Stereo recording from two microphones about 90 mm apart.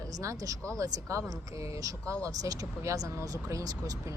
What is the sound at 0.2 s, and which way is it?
Speech, 35° right (ahead or behind).